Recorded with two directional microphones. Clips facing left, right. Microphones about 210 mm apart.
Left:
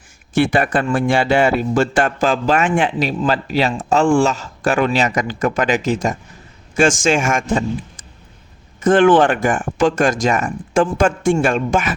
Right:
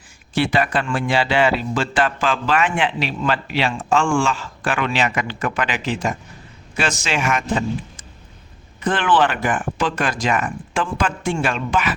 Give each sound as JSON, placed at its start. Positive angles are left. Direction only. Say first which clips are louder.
{"t": 0.3, "sound": "a man's voice", "louder": "left 4 dB", "side_deg": 50}
{"t": 8.8, "sound": "a man's voice", "louder": "left 7 dB", "side_deg": 45}